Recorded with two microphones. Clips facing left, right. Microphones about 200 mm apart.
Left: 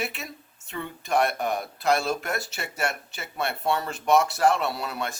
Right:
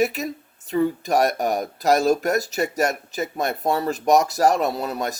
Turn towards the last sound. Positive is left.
turn(degrees=-40)  # may be behind; listen again after turning